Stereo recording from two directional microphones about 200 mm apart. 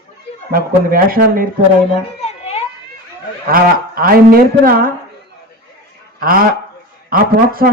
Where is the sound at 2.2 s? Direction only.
30° left (ahead or behind).